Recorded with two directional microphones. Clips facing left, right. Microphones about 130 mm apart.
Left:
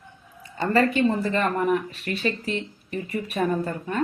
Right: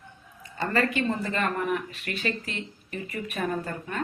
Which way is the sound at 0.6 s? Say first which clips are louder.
Left 5 dB; 30° left (ahead or behind).